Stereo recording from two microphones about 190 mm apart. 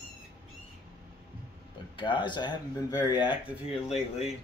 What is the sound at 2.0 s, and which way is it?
Speech, 25° left (ahead or behind).